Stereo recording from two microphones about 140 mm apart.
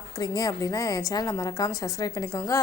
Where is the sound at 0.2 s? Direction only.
25° left (ahead or behind).